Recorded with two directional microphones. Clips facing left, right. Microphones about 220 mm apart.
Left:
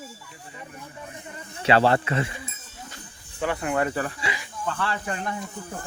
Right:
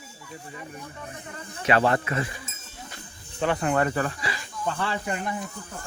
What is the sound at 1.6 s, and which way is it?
Speech, 30° left (ahead or behind).